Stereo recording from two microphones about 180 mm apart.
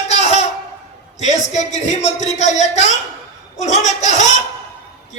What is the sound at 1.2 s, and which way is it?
A man's voice, 40° left (ahead or behind).